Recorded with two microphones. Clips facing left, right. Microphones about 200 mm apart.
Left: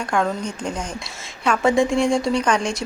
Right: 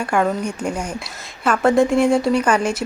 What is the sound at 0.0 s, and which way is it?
A woman's voice, 5° right (ahead or behind).